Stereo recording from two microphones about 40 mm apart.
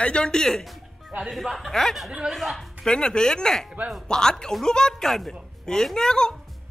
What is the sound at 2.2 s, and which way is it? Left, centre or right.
Speech, right.